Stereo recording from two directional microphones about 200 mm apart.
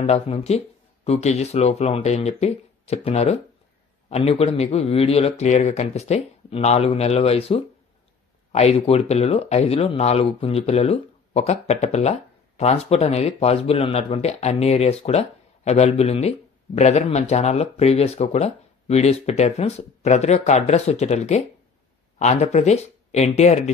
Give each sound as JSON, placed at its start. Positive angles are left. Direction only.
{"t": 0.0, "sound": "speech", "side_deg": 35}